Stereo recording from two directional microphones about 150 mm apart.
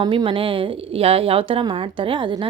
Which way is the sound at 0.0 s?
30° right (ahead or behind).